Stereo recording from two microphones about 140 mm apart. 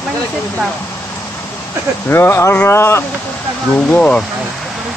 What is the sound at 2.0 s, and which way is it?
Speech, 15° left (ahead or behind).